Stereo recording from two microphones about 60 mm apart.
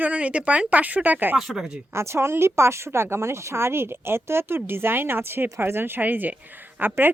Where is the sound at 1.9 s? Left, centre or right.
Right.